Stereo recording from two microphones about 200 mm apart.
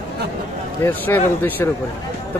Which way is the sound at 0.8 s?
10° left (ahead or behind).